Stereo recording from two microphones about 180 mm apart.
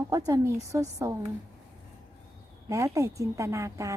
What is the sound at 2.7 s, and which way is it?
A woman's voice, 15° right (ahead or behind).